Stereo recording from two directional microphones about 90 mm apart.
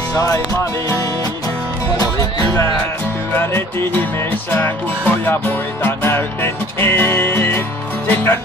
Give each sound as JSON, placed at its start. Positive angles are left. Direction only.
{"t": 0.1, "sound": "music", "side_deg": 45}
{"t": 4.5, "sound": "music", "side_deg": 25}